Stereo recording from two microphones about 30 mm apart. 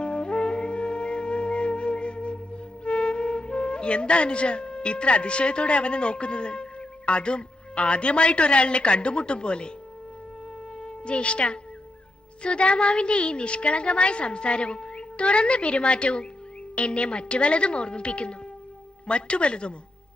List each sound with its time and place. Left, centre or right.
0.0 s wind instrument: left
10.8 s a woman's voice: left